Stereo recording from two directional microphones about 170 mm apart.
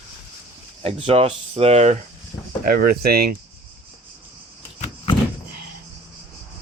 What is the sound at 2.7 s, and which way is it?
Speech, 65° right (ahead or behind).